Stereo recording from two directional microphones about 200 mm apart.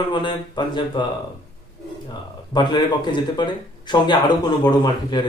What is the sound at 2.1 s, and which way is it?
Speech, 20° left (ahead or behind).